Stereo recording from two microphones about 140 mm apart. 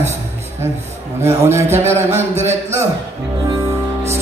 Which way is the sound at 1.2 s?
20° right (ahead or behind).